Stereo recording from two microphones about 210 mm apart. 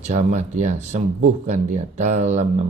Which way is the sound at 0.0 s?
35° right (ahead or behind).